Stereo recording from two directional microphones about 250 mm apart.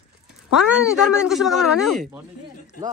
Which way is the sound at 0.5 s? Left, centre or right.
Centre.